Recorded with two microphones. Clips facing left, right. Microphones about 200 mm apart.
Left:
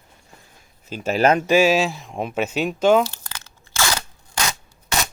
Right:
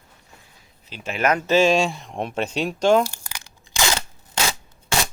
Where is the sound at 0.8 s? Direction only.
45° left (ahead or behind).